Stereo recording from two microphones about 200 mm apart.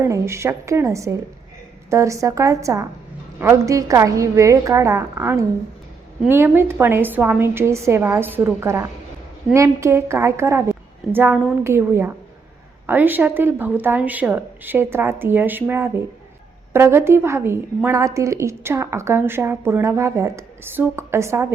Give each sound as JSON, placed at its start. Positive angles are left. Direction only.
{"t": 0.0, "sound": "speech", "side_deg": -15}